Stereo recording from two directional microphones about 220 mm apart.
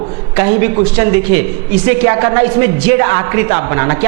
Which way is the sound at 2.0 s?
15° right (ahead or behind).